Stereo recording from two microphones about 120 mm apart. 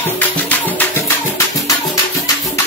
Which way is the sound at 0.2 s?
15° left (ahead or behind).